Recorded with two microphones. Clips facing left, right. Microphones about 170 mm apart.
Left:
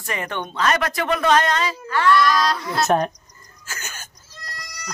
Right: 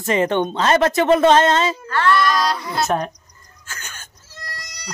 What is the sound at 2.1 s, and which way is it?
Speech, centre (ahead or behind).